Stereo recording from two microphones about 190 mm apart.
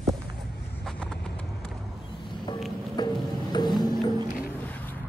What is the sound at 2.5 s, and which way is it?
Music, 20° left (ahead or behind).